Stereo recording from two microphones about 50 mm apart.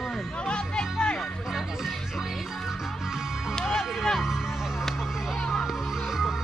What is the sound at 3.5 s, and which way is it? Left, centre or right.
Music, centre.